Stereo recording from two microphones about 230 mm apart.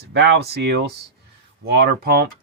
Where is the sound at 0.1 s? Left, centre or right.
Right.